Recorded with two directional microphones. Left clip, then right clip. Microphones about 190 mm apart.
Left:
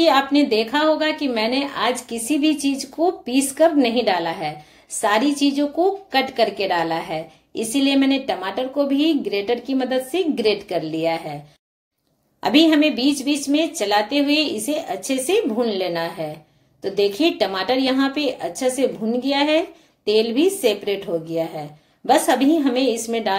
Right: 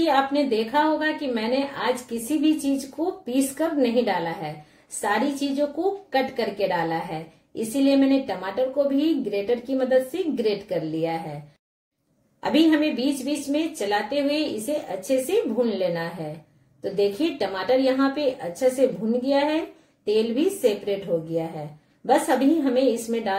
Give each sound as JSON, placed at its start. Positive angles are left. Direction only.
{"t": 0.0, "sound": "a woman's voice", "side_deg": 15}
{"t": 12.4, "sound": "a woman's voice", "side_deg": 15}